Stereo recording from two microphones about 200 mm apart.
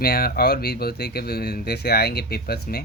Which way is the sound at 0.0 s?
50° left (ahead or behind).